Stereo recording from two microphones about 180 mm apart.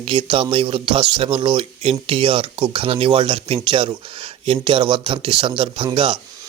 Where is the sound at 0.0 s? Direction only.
30° right (ahead or behind).